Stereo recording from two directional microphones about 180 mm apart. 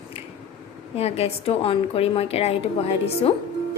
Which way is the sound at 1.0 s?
35° left (ahead or behind).